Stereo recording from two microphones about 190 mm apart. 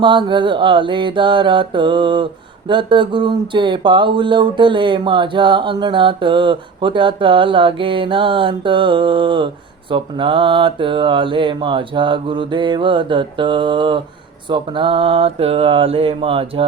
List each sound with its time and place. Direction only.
0.0 s speech: 25° right (ahead or behind)